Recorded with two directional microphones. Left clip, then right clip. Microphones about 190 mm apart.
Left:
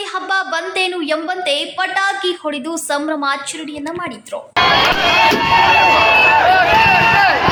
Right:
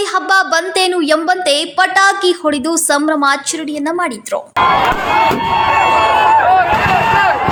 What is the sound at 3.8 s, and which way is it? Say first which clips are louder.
Speech: right 9 dB; 45° right (ahead or behind).